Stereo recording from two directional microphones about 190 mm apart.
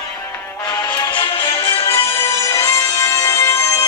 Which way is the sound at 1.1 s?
25° left (ahead or behind).